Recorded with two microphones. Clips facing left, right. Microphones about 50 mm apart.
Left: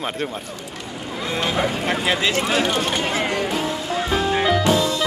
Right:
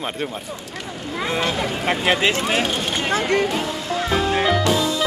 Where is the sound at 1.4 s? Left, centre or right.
Centre.